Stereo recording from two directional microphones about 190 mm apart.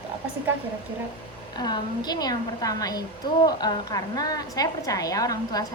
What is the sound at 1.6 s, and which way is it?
A woman's voice, 20° left (ahead or behind).